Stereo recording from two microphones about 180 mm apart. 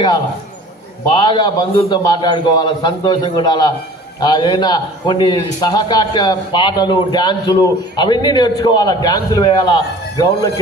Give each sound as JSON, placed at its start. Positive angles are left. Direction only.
{"t": 1.1, "sound": "a man's voice", "side_deg": 25}